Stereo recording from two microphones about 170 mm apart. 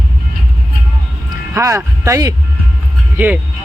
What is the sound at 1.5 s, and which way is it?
Speech, 15° right (ahead or behind).